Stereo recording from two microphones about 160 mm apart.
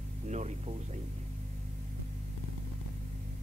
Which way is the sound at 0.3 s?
45° right (ahead or behind).